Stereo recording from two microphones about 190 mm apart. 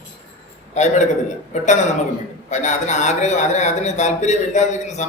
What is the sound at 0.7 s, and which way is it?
A man's voice, 35° left (ahead or behind).